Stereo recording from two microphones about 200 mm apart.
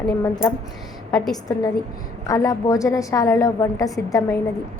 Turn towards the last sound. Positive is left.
turn(degrees=15)  # may be behind; listen again after turning